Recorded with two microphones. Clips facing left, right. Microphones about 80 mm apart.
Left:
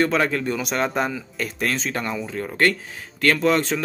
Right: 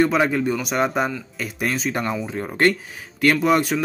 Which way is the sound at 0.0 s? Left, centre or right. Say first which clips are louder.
Right 2 dB; centre.